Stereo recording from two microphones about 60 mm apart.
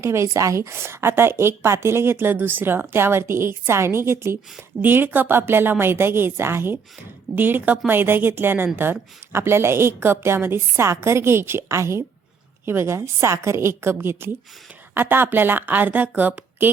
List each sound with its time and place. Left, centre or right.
0.0 s a woman's voice: right
0.7 s speech: right
4.8 s a woman's voice: right